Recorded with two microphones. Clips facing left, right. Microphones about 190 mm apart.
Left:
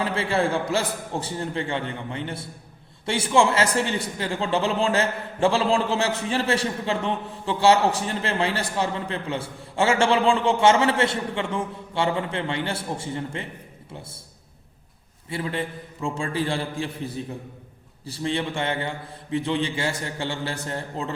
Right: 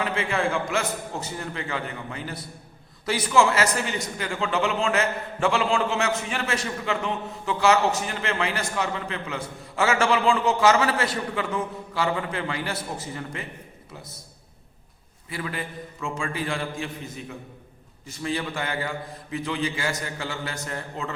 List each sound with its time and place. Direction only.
0.0 s a man's voice: 30° left (ahead or behind)
15.3 s a man's voice: 30° left (ahead or behind)